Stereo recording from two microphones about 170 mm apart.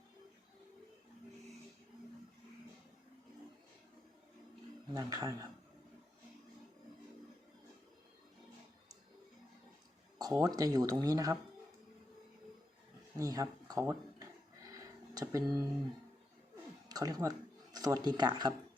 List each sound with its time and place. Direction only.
4.9 s speech: 20° right (ahead or behind)
10.2 s speech: 20° right (ahead or behind)
13.1 s speech: 20° right (ahead or behind)
14.7 s a sound: 20° right (ahead or behind)
16.9 s speech: 20° right (ahead or behind)